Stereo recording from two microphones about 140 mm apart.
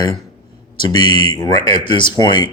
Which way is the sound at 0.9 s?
30° left (ahead or behind).